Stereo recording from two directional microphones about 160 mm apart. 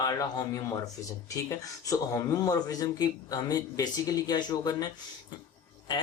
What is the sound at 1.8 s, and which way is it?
Speech, 20° left (ahead or behind).